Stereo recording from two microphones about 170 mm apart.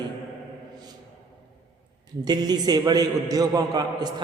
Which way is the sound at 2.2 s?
25° right (ahead or behind).